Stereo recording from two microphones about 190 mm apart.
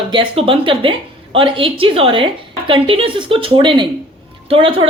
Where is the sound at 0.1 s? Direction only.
30° right (ahead or behind).